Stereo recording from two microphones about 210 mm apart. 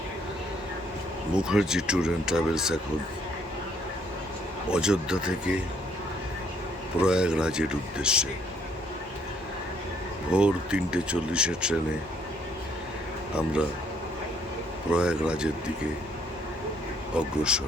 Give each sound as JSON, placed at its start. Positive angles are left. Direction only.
{"t": 1.4, "sound": "speech", "side_deg": -5}
{"t": 4.7, "sound": "speech", "side_deg": -5}
{"t": 7.0, "sound": "speech", "side_deg": -5}
{"t": 10.3, "sound": "speech", "side_deg": -5}
{"t": 13.3, "sound": "speech", "side_deg": -5}
{"t": 14.8, "sound": "speech", "side_deg": -5}
{"t": 17.2, "sound": "speech", "side_deg": -5}